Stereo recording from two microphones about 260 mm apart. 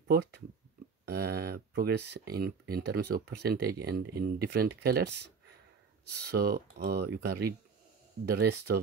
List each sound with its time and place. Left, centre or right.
1.0 s speech: right